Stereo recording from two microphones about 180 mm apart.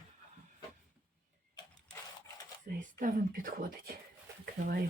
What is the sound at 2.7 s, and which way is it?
Speech, 50° right (ahead or behind).